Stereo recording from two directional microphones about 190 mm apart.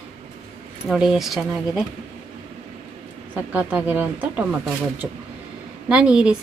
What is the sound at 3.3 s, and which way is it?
Speech, 10° right (ahead or behind).